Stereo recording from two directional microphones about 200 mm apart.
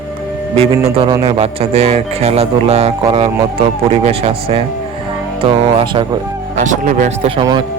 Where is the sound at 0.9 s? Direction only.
25° right (ahead or behind).